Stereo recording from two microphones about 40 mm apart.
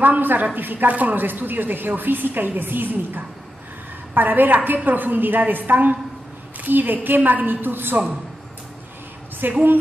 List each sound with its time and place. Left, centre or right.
0.0 s a woman's voice: right
9.5 s a woman's voice: right